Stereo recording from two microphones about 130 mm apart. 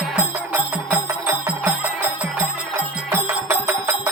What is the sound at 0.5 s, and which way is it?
Music, 10° right (ahead or behind).